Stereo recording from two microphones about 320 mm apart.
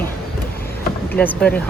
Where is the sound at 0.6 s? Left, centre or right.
Left.